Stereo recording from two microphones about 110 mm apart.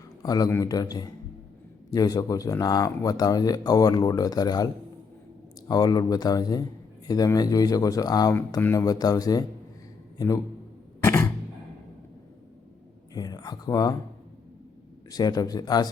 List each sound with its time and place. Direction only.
0.2 s a man's voice: 35° left (ahead or behind)
13.1 s speech: 35° left (ahead or behind)
15.1 s speech: 35° left (ahead or behind)